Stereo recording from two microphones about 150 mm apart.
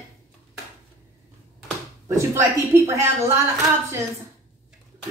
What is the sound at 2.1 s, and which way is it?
Speech, 20° right (ahead or behind).